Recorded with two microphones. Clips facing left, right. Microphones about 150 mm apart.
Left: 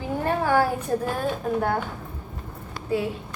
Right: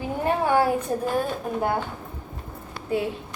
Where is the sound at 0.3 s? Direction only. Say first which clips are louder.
Right 1 dB; 15° right (ahead or behind).